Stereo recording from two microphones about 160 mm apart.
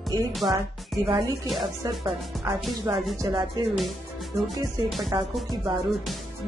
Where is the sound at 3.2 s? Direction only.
25° right (ahead or behind).